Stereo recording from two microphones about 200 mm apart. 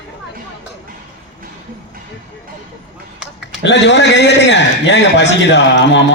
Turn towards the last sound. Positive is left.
turn(degrees=60)  # may be behind; listen again after turning